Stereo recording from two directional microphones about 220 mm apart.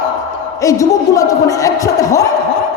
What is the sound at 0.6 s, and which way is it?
Speech, 15° left (ahead or behind).